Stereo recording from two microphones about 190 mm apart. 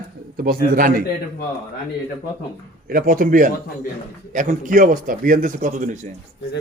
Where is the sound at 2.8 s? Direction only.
50° right (ahead or behind).